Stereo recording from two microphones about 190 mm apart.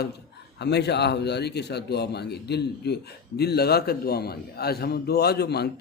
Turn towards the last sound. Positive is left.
turn(degrees=60)  # may be behind; listen again after turning